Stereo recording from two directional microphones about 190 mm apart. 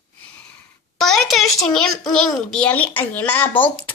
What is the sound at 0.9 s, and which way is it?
A child's voice, centre (ahead or behind).